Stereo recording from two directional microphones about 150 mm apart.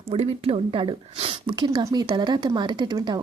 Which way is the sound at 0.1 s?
40° right (ahead or behind).